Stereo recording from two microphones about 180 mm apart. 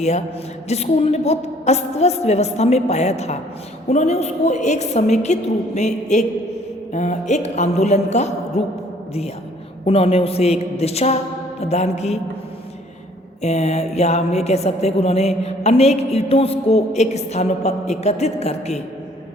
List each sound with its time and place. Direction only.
0.7 s a woman's voice: 35° left (ahead or behind)
9.8 s a woman's voice: 35° left (ahead or behind)
13.4 s a woman's voice: 35° left (ahead or behind)